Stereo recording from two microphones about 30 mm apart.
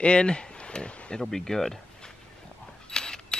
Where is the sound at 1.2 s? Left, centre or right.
Centre.